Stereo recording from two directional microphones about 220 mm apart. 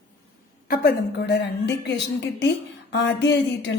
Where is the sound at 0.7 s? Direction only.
45° left (ahead or behind).